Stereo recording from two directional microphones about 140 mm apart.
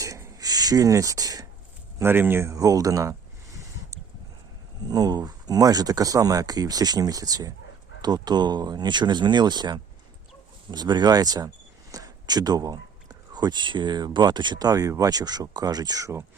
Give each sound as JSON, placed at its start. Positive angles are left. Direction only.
{"t": 0.0, "sound": "a sound", "side_deg": -25}
{"t": 2.0, "sound": "speech", "side_deg": -15}
{"t": 4.9, "sound": "speech", "side_deg": -30}